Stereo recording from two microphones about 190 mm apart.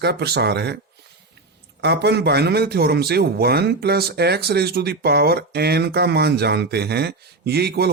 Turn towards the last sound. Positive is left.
turn(degrees=-60)  # may be behind; listen again after turning